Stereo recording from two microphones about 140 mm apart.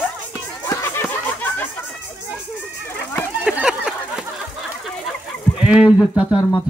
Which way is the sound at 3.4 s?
5° right (ahead or behind).